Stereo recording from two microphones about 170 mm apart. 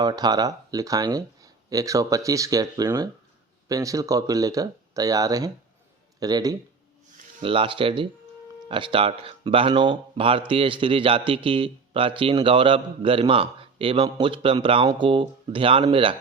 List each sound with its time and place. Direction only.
0.0 s a man's voice: 25° right (ahead or behind)